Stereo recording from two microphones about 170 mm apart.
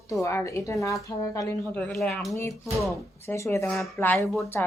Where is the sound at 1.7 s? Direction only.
5° left (ahead or behind).